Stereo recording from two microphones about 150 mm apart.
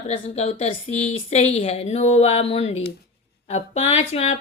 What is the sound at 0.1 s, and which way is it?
A woman's voice, 45° left (ahead or behind).